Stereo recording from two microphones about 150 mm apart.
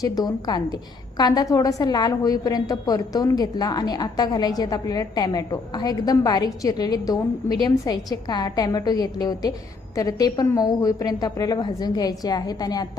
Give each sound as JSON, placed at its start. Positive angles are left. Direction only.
{"t": 0.0, "sound": "a woman's voice", "side_deg": 25}